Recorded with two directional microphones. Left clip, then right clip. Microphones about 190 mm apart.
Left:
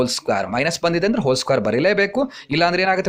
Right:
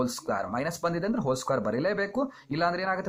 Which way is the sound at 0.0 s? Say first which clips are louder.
Left 9 dB; 30° left (ahead or behind).